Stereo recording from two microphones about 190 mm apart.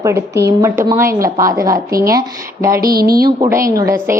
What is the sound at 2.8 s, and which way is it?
Speech, 50° right (ahead or behind).